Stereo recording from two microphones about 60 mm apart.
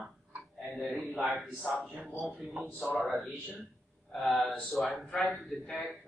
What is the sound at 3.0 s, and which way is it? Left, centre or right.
A man's voice, centre.